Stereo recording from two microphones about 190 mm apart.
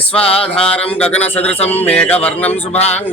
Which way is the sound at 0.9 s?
5° left (ahead or behind).